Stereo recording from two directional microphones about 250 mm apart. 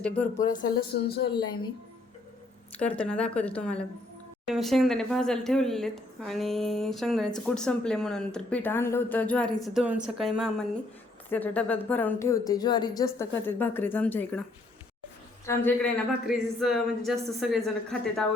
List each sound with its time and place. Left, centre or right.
0.5 s a woman's voice: left
2.7 s speech: centre
15.4 s speech: centre